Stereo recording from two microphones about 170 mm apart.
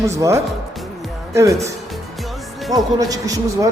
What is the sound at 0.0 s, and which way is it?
Speech, 15° right (ahead or behind).